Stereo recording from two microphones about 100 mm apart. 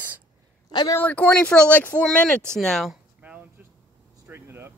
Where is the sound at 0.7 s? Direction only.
45° left (ahead or behind).